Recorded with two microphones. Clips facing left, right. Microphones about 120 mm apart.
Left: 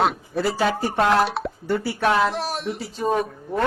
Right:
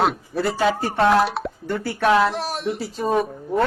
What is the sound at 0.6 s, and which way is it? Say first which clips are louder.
Speech: right 3 dB; 15° left (ahead or behind).